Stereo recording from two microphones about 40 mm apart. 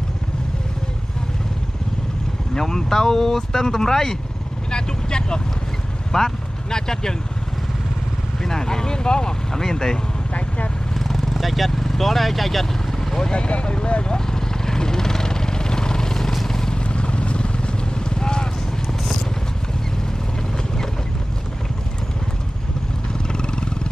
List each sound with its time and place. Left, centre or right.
2.5 s speech: centre
8.4 s speech: centre
11.0 s speech: centre
13.1 s speech: centre
14.1 s vehicle: centre
16.9 s vehicle: left
23.2 s vehicle: left